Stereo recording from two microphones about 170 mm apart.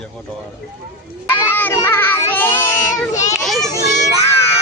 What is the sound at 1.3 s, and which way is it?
A child's voice, 10° left (ahead or behind).